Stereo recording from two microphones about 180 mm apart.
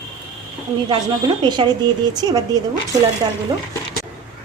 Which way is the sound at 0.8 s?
25° right (ahead or behind).